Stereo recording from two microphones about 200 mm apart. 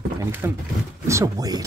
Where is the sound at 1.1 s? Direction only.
15° right (ahead or behind).